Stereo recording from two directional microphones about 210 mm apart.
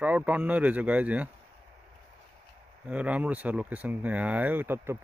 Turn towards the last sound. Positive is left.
turn(degrees=-10)  # may be behind; listen again after turning